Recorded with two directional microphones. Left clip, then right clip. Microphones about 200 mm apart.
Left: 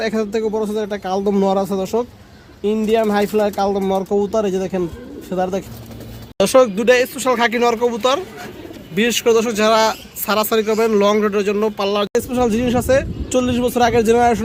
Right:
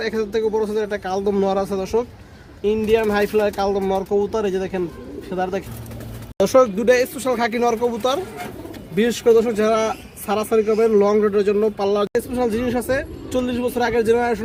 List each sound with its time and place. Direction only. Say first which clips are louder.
0.0 s speech: left 1 dB; 45° left (ahead or behind)
6.4 s a man's voice: left 2 dB; centre (ahead or behind)
12.1 s speech: left 3 dB; 45° left (ahead or behind)